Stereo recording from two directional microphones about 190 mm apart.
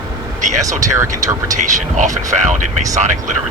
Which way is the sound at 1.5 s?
40° right (ahead or behind).